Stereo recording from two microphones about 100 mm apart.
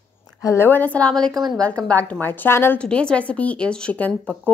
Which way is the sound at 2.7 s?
10° left (ahead or behind).